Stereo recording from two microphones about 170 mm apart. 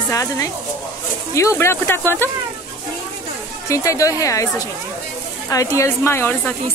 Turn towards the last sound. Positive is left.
turn(degrees=15)  # may be behind; listen again after turning